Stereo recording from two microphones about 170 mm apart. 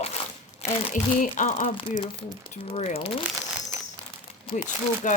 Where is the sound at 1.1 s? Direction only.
50° left (ahead or behind).